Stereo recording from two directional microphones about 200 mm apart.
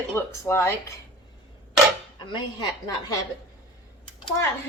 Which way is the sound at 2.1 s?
20° left (ahead or behind).